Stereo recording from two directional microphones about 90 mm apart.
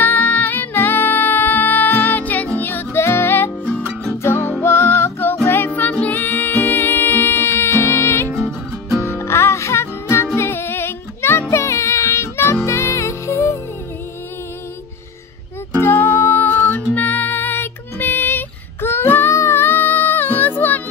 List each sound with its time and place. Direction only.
0.0 s music: 20° left (ahead or behind)
4.6 s music: 25° left (ahead or behind)
8.3 s music: centre (ahead or behind)
9.0 s music: 30° left (ahead or behind)
15.8 s music: 25° left (ahead or behind)